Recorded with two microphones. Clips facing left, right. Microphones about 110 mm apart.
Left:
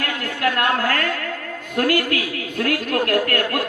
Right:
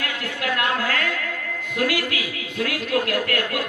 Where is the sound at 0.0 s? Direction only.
50° left (ahead or behind).